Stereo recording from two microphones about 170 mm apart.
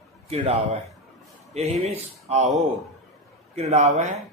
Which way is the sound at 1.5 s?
40° right (ahead or behind).